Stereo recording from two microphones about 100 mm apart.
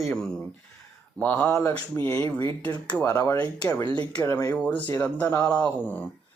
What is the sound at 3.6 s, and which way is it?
Speech, 35° left (ahead or behind).